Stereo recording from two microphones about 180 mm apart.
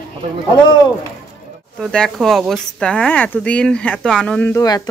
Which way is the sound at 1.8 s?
5° left (ahead or behind).